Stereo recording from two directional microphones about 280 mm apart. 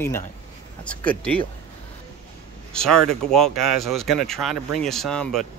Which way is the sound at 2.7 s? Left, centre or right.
Centre.